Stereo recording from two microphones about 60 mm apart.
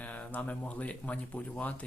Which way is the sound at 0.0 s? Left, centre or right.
Left.